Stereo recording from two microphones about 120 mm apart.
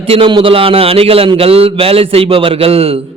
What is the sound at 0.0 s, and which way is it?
A man's voice, 50° right (ahead or behind).